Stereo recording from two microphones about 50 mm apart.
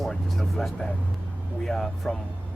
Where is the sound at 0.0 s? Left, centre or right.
Centre.